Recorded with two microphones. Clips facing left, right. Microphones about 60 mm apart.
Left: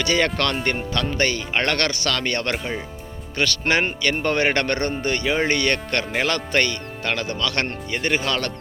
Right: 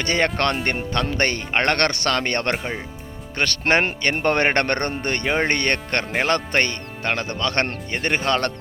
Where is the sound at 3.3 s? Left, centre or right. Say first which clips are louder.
Right 1 dB; right.